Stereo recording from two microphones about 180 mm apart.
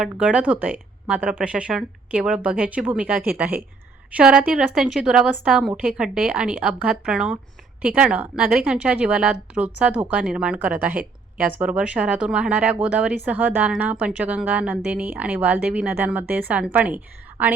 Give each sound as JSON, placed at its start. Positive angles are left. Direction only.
{"t": 0.0, "sound": "a woman's voice", "side_deg": -5}